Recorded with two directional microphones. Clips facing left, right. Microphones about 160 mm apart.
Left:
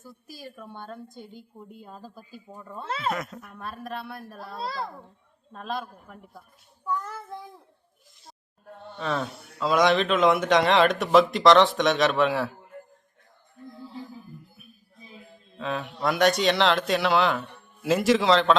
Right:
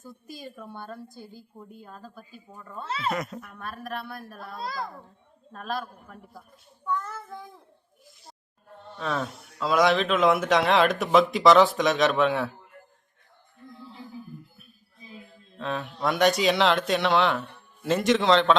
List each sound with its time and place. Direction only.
0.3 s a woman's voice: 15° right (ahead or behind)
1.0 s a woman's voice: 20° left (ahead or behind)
2.5 s child singing: 15° left (ahead or behind)
3.1 s speech: centre (ahead or behind)
4.4 s a child's voice: 30° left (ahead or behind)
5.5 s speech: centre (ahead or behind)
6.8 s child singing: 10° left (ahead or behind)
9.0 s speech: centre (ahead or behind)
15.5 s speech: 5° left (ahead or behind)